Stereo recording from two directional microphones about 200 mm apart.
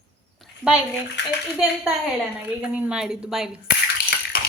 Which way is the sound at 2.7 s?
5° right (ahead or behind).